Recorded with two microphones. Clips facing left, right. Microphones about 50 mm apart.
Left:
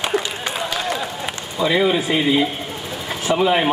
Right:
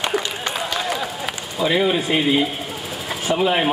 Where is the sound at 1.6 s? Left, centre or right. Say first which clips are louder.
Left 1 dB; centre.